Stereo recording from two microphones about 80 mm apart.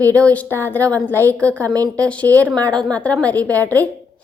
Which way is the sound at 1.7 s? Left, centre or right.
Right.